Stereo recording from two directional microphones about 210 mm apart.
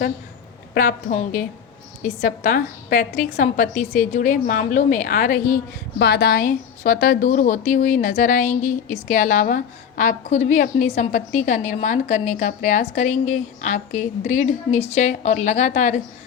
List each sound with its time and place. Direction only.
0.7 s a woman's voice: 45° left (ahead or behind)
6.0 s a woman's voice: 50° left (ahead or behind); by 16.0 s 35° left (ahead or behind)